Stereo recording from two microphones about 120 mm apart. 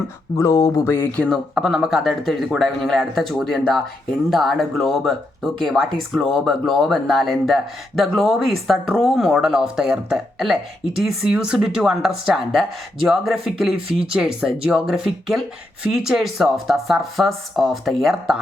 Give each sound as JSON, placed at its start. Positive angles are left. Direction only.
{"t": 0.3, "sound": "speech", "side_deg": 30}
{"t": 1.5, "sound": "speech", "side_deg": -5}